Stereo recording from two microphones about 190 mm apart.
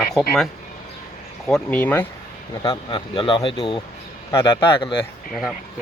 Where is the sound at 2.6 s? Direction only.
25° left (ahead or behind).